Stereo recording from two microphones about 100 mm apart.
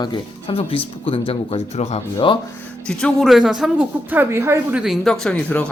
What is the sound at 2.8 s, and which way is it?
Speech, 5° left (ahead or behind).